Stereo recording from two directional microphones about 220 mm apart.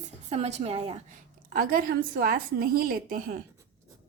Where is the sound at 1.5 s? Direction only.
40° right (ahead or behind).